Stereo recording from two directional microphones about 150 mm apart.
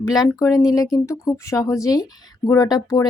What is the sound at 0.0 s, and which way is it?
A woman's voice, 25° left (ahead or behind).